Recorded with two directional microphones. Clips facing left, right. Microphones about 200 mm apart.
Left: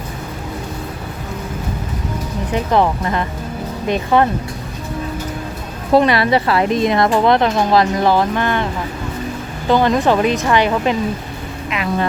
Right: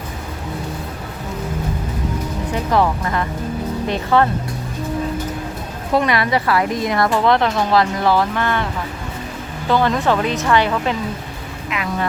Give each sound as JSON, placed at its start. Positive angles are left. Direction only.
{"t": 2.7, "sound": "a woman's voice", "side_deg": 20}
{"t": 5.9, "sound": "a woman's voice", "side_deg": 30}
{"t": 9.6, "sound": "a woman's voice", "side_deg": 15}